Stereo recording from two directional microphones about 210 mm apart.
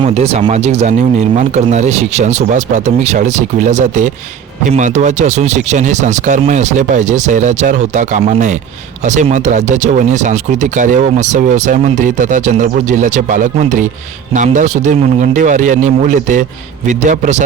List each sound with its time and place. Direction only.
0.0 s speech: 30° right (ahead or behind)